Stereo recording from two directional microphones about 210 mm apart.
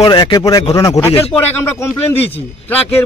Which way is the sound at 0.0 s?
20° left (ahead or behind).